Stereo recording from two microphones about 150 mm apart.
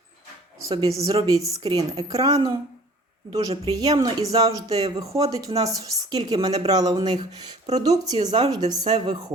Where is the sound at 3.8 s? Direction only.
25° right (ahead or behind).